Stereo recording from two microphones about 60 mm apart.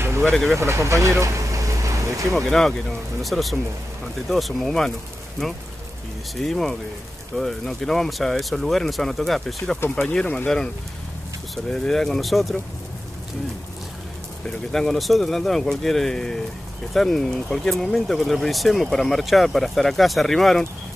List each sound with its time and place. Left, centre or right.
0.3 s speech: centre
0.6 s speech: right
2.3 s speech: centre
6.4 s speech: centre
9.8 s speech: centre
11.5 s speech: centre
14.4 s speech: centre